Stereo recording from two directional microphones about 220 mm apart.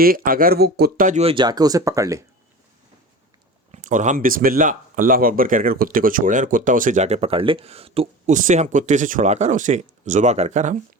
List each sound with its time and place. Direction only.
0.0 s speech: 40° right (ahead or behind); by 2.2 s 15° right (ahead or behind)
3.7 s speech: 35° right (ahead or behind)